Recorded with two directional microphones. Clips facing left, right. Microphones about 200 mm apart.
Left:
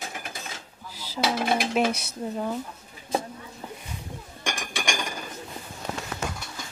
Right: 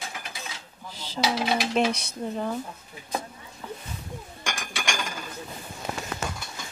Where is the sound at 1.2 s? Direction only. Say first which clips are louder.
Left 1 dB; 50° left (ahead or behind).